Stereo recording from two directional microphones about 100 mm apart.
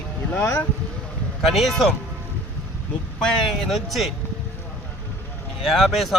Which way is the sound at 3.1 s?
5° left (ahead or behind).